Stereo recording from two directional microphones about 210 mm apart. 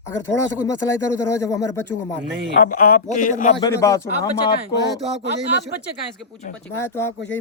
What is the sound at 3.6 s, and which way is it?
Speech, 15° left (ahead or behind).